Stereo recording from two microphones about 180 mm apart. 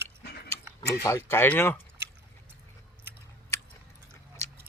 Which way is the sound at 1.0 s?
15° left (ahead or behind).